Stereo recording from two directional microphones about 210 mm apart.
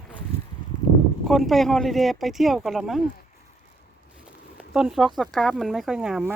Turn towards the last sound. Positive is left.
turn(degrees=-5)  # may be behind; listen again after turning